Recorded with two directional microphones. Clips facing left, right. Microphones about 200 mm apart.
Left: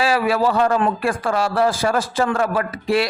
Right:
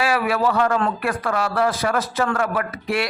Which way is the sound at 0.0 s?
30° left (ahead or behind).